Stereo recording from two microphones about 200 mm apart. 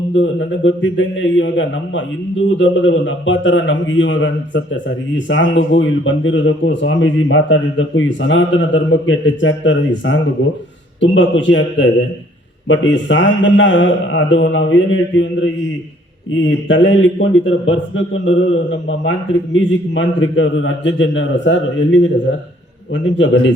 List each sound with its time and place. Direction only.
0.1 s speech: 70° left (ahead or behind)